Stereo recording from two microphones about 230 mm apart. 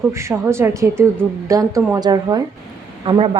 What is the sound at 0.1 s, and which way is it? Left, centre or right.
A woman's voice, centre.